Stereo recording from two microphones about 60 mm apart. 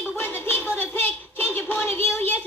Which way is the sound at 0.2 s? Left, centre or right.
Left.